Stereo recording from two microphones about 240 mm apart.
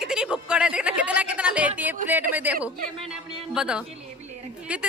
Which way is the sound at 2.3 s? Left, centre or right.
Centre.